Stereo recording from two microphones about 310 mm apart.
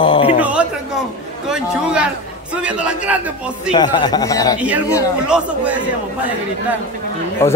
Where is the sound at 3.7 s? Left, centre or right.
Centre.